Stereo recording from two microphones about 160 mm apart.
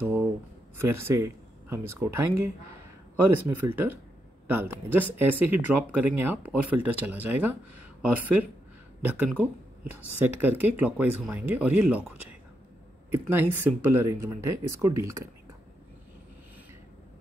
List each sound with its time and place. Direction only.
0.7 s speech: 15° right (ahead or behind)